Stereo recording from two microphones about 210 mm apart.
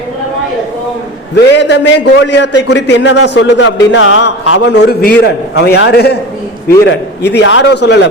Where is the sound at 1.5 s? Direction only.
60° left (ahead or behind).